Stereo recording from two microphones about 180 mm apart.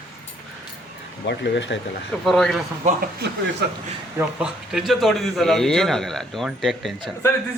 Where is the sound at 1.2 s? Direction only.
75° left (ahead or behind).